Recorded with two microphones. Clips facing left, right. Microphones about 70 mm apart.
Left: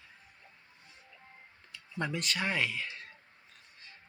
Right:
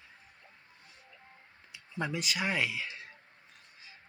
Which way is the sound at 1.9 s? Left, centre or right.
Centre.